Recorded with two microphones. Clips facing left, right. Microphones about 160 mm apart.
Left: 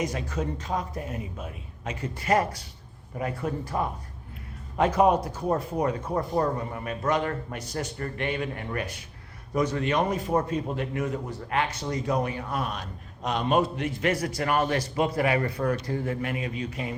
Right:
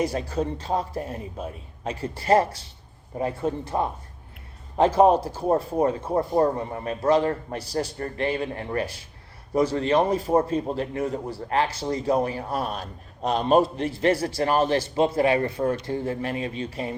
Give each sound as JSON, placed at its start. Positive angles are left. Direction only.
{"t": 0.0, "sound": "a man's voice", "side_deg": -35}